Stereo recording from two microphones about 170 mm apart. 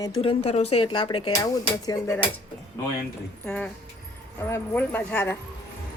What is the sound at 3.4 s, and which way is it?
A woman's voice, 5° left (ahead or behind).